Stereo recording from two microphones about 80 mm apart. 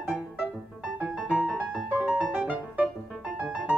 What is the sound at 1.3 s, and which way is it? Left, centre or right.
Music, centre.